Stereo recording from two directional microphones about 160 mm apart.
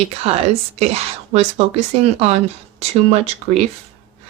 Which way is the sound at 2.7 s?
40° right (ahead or behind).